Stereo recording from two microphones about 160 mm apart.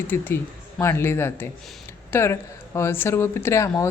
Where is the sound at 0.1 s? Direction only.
15° left (ahead or behind).